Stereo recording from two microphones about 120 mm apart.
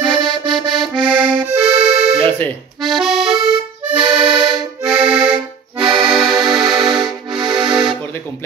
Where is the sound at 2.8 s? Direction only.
Centre (ahead or behind).